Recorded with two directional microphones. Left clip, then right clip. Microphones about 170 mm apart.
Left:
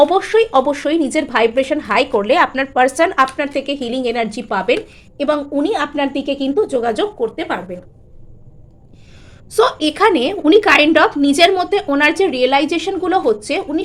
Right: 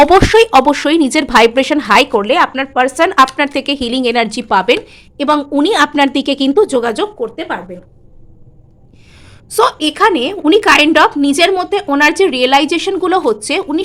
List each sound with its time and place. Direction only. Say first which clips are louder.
0.0 s speech: right 5 dB; 35° right (ahead or behind)
2.1 s speech: right 2 dB; 15° right (ahead or behind); by 6.8 s 40° right (ahead or behind)
6.8 s speech: right 2 dB; 25° right (ahead or behind)
7.2 s speech: even; centre (ahead or behind)
9.5 s speech: right 2 dB; 20° right (ahead or behind)